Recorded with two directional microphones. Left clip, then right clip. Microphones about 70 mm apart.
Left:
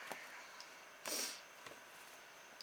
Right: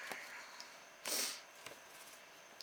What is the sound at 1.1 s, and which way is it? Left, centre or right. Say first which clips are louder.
Sniff: right 3 dB; right.